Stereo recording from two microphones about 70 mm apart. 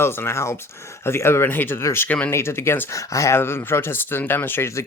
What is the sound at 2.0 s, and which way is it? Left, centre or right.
Speech, centre.